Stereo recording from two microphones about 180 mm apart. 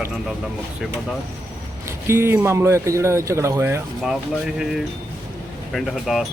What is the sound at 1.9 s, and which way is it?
Speech, 15° right (ahead or behind).